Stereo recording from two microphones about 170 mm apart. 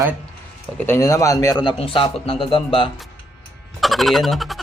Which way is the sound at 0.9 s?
20° left (ahead or behind).